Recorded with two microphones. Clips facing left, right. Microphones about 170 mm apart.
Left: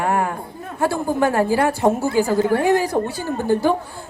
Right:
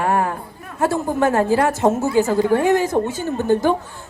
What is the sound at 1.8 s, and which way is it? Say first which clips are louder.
A woman's voice: right 1 dB; 20° right (ahead or behind).